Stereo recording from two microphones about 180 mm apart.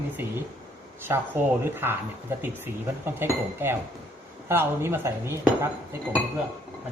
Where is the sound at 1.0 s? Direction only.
10° right (ahead or behind).